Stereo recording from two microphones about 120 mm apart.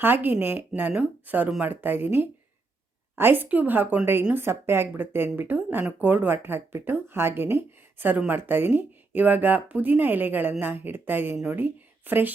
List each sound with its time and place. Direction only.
0.0 s a woman's voice: 15° right (ahead or behind)